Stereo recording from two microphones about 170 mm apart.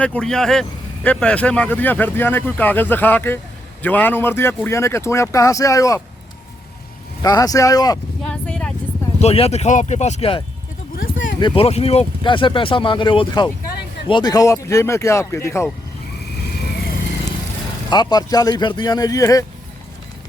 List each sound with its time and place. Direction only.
0.0 s speech: 5° left (ahead or behind)
7.2 s speech: 20° left (ahead or behind)
8.3 s vehicle: 5° left (ahead or behind)
9.2 s speech: 35° left (ahead or behind)
10.9 s a sound: 60° left (ahead or behind)
11.3 s speech: 30° left (ahead or behind)
17.9 s speech: 25° left (ahead or behind)